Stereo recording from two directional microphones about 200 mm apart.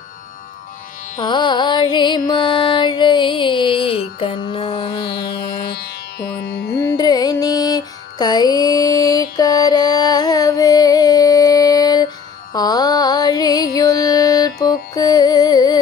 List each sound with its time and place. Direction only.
1.2 s music: 25° left (ahead or behind)
5.2 s music: 55° left (ahead or behind)
6.8 s music: 15° left (ahead or behind)
12.5 s mantra: 20° left (ahead or behind)
13.7 s music: 20° left (ahead or behind)